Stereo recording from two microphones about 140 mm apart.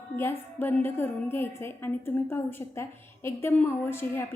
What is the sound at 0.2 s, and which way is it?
A woman's voice, 15° left (ahead or behind).